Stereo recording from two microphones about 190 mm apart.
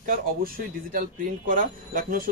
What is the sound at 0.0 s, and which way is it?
Speech, 50° right (ahead or behind).